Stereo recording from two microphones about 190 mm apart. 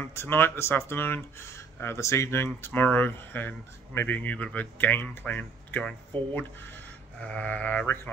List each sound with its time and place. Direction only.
0.0 s speech: 15° left (ahead or behind)